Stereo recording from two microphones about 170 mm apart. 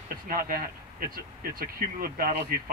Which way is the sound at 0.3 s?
60° right (ahead or behind).